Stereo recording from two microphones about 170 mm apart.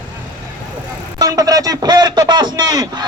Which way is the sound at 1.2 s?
20° right (ahead or behind).